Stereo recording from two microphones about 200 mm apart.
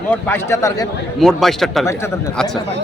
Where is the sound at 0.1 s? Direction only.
10° left (ahead or behind).